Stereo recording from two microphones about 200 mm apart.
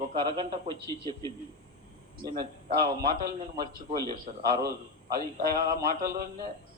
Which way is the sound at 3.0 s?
50° right (ahead or behind).